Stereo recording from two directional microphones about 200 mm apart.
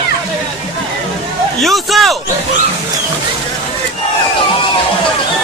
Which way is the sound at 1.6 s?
Centre (ahead or behind).